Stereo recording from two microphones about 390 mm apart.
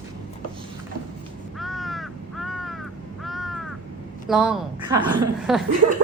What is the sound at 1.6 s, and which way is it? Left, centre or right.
Crow, centre.